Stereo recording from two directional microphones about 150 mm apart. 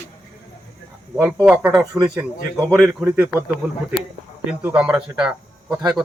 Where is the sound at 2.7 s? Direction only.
15° right (ahead or behind).